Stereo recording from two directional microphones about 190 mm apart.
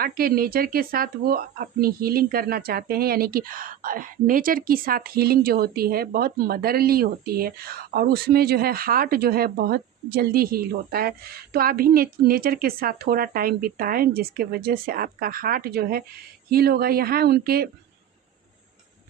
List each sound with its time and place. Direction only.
0.0 s speech: 50° right (ahead or behind)